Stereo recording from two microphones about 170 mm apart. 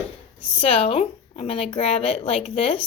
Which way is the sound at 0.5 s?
35° left (ahead or behind).